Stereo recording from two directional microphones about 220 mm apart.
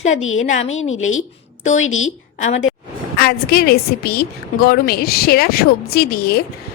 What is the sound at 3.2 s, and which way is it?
A woman's voice, 45° left (ahead or behind).